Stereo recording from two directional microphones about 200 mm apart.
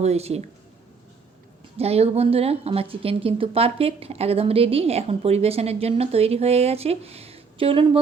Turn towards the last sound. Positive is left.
turn(degrees=-25)  # may be behind; listen again after turning